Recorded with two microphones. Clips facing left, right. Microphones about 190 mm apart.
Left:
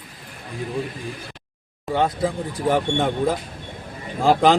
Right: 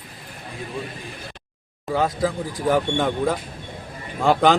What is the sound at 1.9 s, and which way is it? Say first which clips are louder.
Speech: even; 30° left (ahead or behind).